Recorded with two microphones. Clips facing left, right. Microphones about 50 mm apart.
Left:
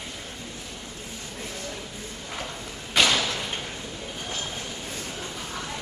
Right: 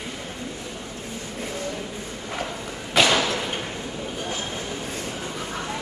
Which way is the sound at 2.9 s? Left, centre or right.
Centre.